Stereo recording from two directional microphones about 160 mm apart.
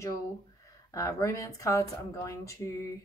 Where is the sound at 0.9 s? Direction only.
20° left (ahead or behind).